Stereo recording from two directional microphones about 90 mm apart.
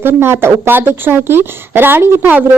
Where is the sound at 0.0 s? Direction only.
25° right (ahead or behind).